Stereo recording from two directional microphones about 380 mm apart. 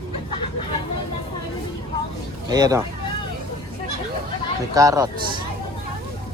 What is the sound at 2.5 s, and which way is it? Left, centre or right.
Speech, centre.